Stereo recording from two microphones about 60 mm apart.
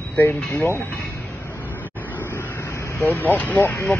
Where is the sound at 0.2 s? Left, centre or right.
Left.